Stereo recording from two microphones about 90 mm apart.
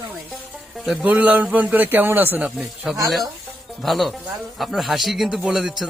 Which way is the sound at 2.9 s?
10° right (ahead or behind).